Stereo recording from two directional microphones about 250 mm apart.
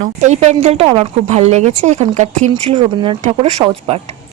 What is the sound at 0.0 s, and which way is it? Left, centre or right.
A woman's voice, right.